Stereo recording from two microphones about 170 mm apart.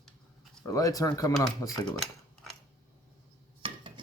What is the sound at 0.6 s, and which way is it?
Speech, 20° left (ahead or behind).